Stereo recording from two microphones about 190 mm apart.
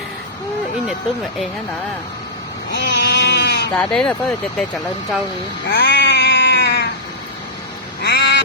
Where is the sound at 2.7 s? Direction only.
65° left (ahead or behind).